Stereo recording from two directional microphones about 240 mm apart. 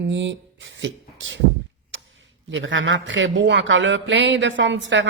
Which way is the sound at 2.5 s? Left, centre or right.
Right.